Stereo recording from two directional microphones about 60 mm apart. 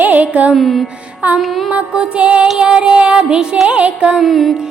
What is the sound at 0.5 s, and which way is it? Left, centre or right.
Music, centre.